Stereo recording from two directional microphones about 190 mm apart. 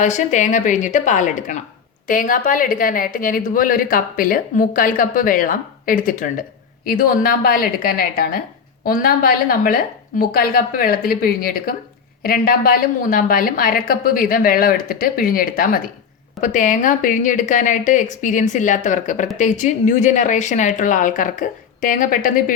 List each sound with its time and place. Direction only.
0.0 s a woman's voice: 40° left (ahead or behind)